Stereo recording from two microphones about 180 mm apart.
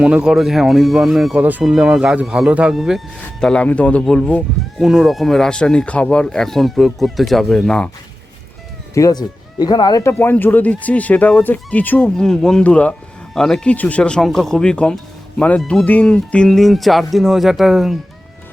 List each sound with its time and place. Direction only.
0.0 s speech: 5° right (ahead or behind)
9.0 s speech: 20° left (ahead or behind); by 17.9 s centre (ahead or behind)